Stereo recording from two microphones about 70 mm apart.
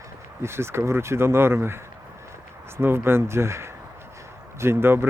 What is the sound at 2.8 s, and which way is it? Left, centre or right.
Speech, right.